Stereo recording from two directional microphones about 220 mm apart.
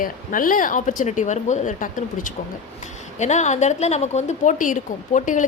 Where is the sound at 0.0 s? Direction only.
40° left (ahead or behind).